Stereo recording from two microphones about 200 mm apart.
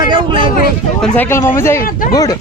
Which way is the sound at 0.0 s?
25° right (ahead or behind).